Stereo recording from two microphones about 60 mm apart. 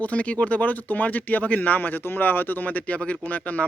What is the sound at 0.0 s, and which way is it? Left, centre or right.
Speech, left.